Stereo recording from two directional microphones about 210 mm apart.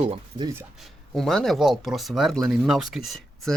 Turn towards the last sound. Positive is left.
turn(degrees=0)  # may be behind; listen again after turning